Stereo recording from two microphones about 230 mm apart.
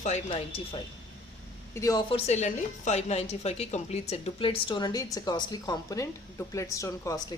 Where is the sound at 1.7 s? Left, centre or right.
Centre.